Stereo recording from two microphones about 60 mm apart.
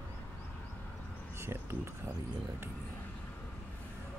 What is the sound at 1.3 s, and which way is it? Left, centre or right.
Speech, right.